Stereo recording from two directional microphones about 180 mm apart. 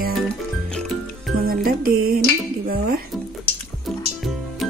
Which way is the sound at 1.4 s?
55° right (ahead or behind).